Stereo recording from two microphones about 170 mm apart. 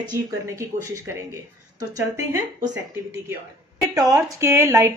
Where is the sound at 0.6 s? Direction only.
20° right (ahead or behind).